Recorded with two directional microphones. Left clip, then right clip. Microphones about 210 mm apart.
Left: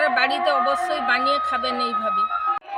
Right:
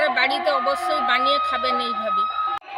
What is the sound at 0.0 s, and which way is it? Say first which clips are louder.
A woman's voice: even; 5° left (ahead or behind).